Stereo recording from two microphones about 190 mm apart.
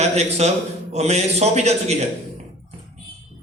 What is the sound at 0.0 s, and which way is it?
A man's voice, 35° right (ahead or behind).